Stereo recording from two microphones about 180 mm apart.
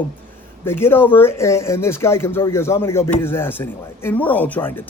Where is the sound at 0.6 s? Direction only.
15° left (ahead or behind).